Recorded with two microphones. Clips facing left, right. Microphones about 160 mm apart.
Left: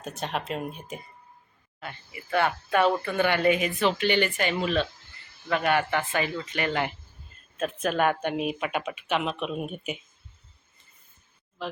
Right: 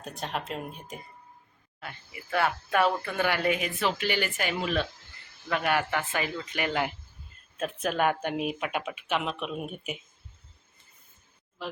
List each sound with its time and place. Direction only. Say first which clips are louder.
0.2 s speech: left 3 dB; centre (ahead or behind)